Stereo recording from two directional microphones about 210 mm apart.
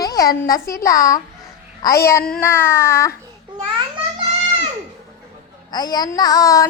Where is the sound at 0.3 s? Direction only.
45° left (ahead or behind).